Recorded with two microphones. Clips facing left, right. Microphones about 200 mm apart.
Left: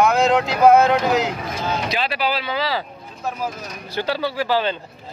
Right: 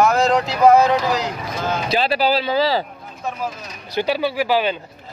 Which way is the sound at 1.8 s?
35° right (ahead or behind).